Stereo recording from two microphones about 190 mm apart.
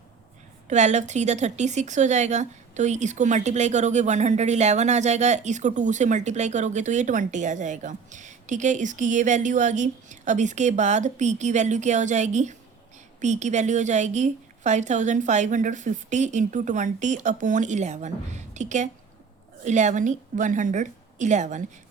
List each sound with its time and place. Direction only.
0.7 s a woman's voice: 35° right (ahead or behind)